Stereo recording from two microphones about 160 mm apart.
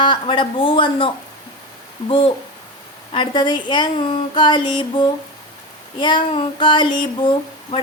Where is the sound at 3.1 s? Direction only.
30° left (ahead or behind).